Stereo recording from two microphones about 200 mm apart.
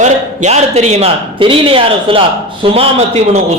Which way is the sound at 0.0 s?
35° right (ahead or behind).